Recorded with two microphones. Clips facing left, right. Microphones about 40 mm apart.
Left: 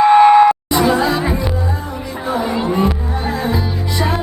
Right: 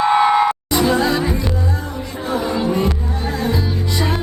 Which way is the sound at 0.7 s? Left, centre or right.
Centre.